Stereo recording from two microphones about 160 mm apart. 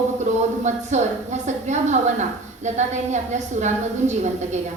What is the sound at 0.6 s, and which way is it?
A woman's voice, 45° right (ahead or behind).